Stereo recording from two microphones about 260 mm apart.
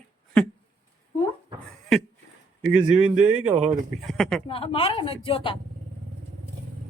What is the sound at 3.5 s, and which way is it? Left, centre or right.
Speech, right.